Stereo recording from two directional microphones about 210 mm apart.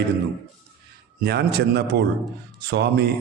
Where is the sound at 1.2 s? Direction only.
50° right (ahead or behind).